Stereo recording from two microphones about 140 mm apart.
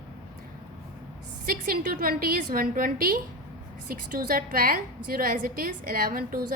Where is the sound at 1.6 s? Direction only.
85° right.